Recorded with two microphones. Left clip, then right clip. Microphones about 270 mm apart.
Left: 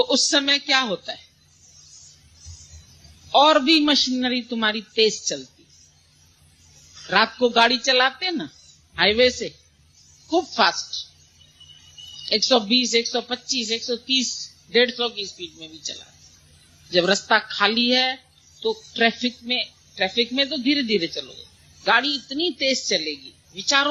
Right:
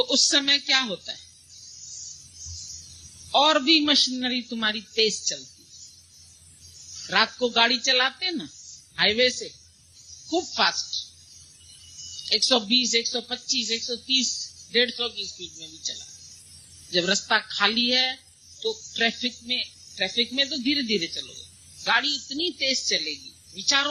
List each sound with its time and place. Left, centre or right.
0.0 s a woman's voice: right
3.3 s a woman's voice: right
7.1 s a woman's voice: right
12.2 s a woman's voice: right